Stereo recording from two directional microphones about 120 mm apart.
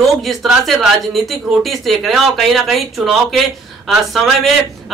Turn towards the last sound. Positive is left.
turn(degrees=0)  # may be behind; listen again after turning